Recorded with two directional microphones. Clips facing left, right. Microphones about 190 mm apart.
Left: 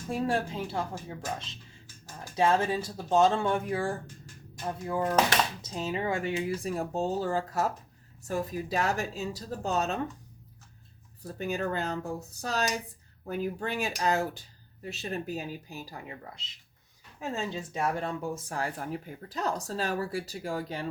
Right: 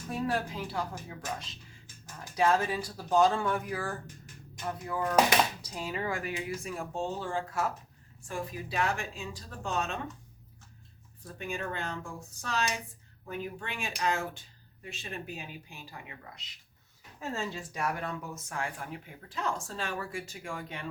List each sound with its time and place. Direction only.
0.1 s speech: 25° left (ahead or behind)
2.3 s speech: 25° left (ahead or behind)
11.3 s speech: 40° left (ahead or behind)
17.2 s speech: 20° left (ahead or behind); by 20.8 s 35° left (ahead or behind)